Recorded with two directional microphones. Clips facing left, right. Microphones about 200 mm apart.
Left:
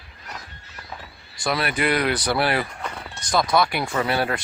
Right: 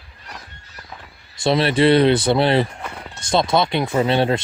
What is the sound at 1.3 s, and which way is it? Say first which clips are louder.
Speech: right 8 dB; 25° right (ahead or behind).